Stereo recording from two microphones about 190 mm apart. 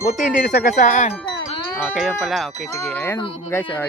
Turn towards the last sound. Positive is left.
turn(degrees=15)  # may be behind; listen again after turning